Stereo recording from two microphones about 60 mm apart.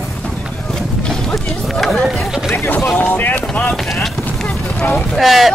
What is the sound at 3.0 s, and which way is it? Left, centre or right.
Boat, left.